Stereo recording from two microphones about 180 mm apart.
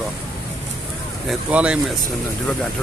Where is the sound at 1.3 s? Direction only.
5° right (ahead or behind).